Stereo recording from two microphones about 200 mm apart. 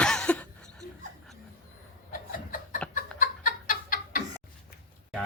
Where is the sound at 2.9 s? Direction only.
45° left (ahead or behind).